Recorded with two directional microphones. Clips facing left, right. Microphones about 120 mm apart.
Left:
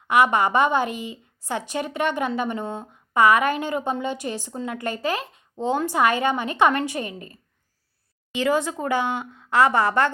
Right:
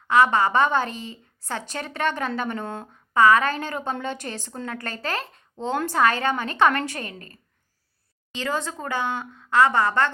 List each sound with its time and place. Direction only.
0.1 s a woman's voice: 20° left (ahead or behind)